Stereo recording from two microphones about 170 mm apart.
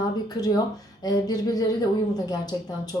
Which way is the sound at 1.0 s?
20° left (ahead or behind).